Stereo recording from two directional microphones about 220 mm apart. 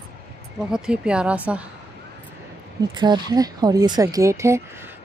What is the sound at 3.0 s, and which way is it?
Speech, 20° right (ahead or behind).